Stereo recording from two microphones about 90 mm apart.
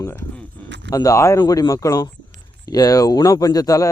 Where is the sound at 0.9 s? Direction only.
40° left (ahead or behind).